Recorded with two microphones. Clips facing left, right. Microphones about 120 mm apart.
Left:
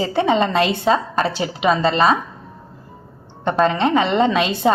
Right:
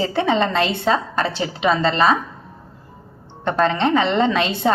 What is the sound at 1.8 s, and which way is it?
Speech, 25° left (ahead or behind).